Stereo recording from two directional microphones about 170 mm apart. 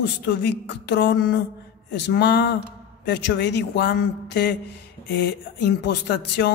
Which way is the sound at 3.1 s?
85° left.